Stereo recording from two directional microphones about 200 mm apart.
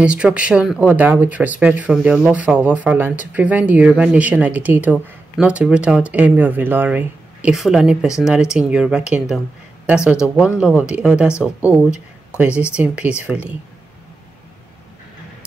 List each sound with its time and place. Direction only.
0.0 s speech: 5° right (ahead or behind)
12.4 s speech: 5° right (ahead or behind)